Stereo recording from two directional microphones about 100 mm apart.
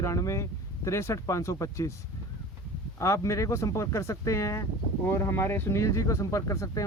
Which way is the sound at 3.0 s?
30° left (ahead or behind).